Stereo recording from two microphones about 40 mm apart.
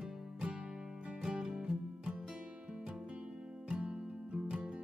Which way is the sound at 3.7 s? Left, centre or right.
Right.